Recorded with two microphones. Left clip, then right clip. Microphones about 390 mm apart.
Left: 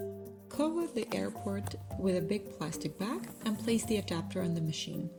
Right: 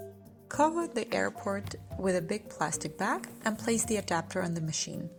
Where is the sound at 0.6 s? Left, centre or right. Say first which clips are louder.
Right 5 dB; centre.